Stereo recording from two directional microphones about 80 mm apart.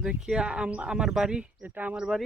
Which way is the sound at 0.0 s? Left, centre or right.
Centre.